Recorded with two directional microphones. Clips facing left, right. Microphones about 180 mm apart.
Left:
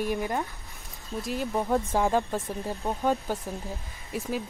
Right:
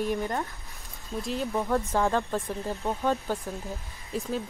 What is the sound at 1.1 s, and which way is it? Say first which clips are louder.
Speech: even; centre (ahead or behind).